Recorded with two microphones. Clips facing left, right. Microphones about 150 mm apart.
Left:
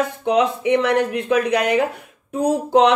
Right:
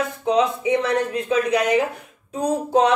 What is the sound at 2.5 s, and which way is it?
Music, 70° left (ahead or behind).